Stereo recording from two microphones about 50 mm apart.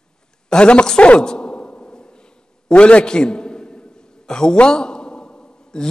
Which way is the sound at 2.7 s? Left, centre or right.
Left.